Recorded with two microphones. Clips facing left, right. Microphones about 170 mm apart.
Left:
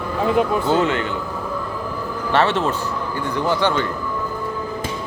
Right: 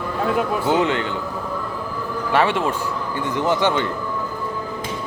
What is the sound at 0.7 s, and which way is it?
Speech, 15° right (ahead or behind).